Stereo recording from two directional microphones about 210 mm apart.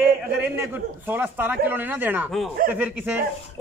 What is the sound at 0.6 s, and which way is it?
A man's voice, 10° right (ahead or behind).